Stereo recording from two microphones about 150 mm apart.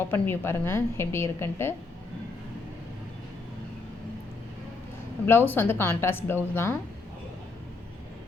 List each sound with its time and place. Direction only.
0.1 s speech: 15° left (ahead or behind)
5.2 s speech: 15° left (ahead or behind)